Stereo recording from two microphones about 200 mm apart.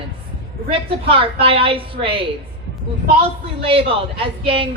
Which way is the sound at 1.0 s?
25° right (ahead or behind).